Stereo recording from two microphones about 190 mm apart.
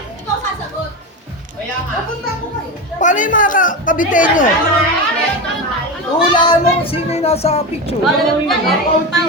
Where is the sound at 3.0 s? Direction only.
45° left (ahead or behind).